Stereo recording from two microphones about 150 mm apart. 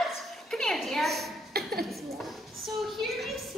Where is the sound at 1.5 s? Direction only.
90° right.